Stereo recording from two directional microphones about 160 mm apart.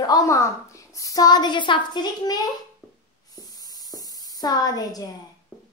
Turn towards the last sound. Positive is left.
turn(degrees=25)  # may be behind; listen again after turning